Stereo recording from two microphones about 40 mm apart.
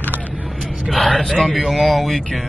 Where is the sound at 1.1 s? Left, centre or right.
Centre.